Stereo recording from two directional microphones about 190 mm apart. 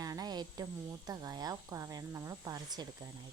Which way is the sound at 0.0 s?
20° right (ahead or behind).